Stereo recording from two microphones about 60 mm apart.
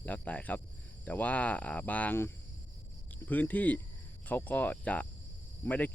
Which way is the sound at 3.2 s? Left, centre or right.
Left.